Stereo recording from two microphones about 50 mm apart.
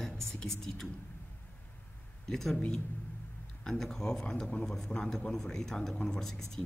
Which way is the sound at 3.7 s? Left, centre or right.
Centre.